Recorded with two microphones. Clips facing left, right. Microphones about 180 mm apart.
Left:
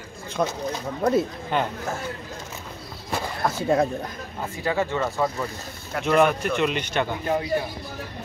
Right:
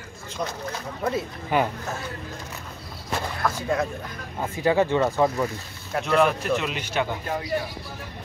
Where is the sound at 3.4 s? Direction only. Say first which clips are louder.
Left 4 dB; 25° left (ahead or behind).